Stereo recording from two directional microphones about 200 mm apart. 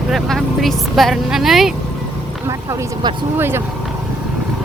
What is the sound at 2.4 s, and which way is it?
Speech, 15° right (ahead or behind).